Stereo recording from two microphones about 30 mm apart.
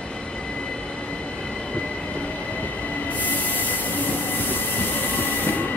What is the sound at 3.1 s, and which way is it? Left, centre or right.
Train, left.